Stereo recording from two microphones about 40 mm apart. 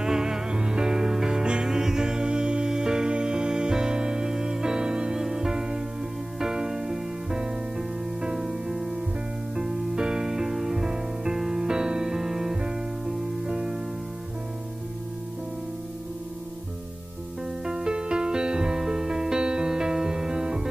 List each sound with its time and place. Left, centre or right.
0.0 s music: centre
17.6 s music: centre